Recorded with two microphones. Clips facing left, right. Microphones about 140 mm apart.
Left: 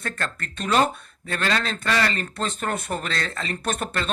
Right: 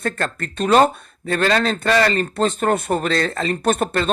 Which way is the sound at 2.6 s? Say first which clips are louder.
Right 9 dB; 50° right (ahead or behind).